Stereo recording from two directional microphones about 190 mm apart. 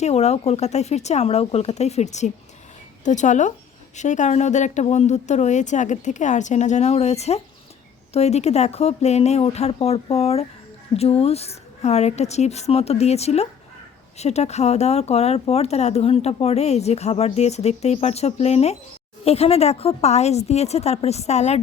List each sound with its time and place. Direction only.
0.0 s speech: 35° left (ahead or behind)